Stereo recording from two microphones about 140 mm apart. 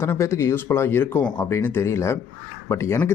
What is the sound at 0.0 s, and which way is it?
Speech, 20° left (ahead or behind).